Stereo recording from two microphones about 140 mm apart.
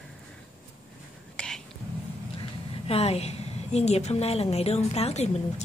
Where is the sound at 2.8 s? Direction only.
45° left (ahead or behind).